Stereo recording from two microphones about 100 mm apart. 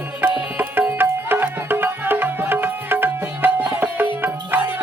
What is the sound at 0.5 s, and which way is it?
Music, 20° right (ahead or behind).